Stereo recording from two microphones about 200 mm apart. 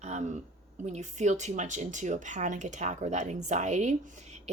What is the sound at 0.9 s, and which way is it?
Speech, 35° right (ahead or behind).